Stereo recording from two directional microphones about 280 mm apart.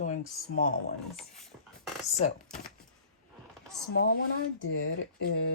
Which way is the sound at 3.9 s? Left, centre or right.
Left.